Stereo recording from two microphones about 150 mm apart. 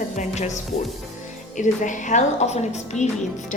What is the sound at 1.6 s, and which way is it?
A woman's voice, 55° left (ahead or behind).